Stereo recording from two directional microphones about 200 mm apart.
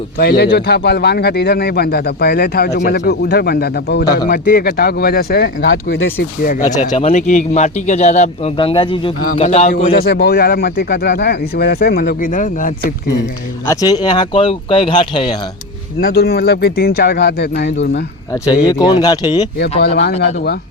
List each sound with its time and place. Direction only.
0.2 s a man's voice: 50° left (ahead or behind)
6.7 s a man's voice: 35° left (ahead or behind)
9.2 s a man's voice: 40° left (ahead or behind)
10.0 s a man's voice: 55° left (ahead or behind)
13.7 s speech: 20° left (ahead or behind)
16.0 s a man's voice: 50° left (ahead or behind)
18.4 s speech: 5° right (ahead or behind)
18.7 s speech: 20° left (ahead or behind)
20.2 s a man's voice: 55° left (ahead or behind)